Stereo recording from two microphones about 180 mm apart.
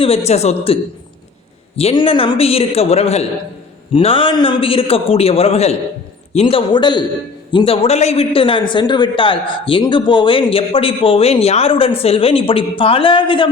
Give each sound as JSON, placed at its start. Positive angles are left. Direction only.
{"t": 0.3, "sound": "a man's voice", "side_deg": 35}